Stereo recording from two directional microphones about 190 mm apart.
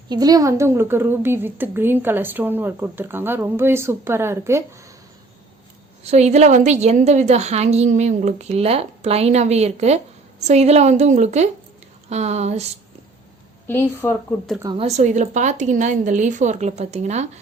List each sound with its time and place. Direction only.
0.1 s a woman's voice: 20° right (ahead or behind)
6.0 s a woman's voice: 35° right (ahead or behind)
13.7 s a woman's voice: 10° left (ahead or behind)
14.6 s a woman's voice: 25° right (ahead or behind)
14.8 s a woman's voice: 35° right (ahead or behind)